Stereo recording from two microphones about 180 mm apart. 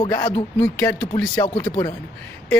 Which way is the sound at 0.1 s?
15° left (ahead or behind).